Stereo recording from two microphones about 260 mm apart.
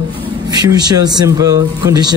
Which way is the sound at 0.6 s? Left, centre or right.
Centre.